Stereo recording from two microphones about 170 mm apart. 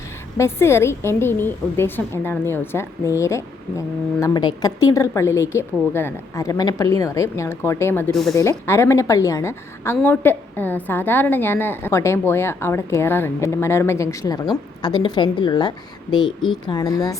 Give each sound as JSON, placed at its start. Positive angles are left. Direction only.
{"t": 0.3, "sound": "a woman's voice", "side_deg": 15}
{"t": 8.1, "sound": "a woman's voice", "side_deg": 0}
{"t": 8.4, "sound": "a woman's voice", "side_deg": 15}